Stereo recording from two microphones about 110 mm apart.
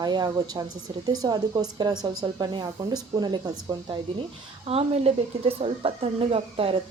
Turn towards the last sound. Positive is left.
turn(degrees=-55)  # may be behind; listen again after turning